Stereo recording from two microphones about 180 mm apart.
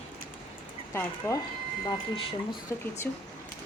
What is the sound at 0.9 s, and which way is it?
Speech, 10° left (ahead or behind).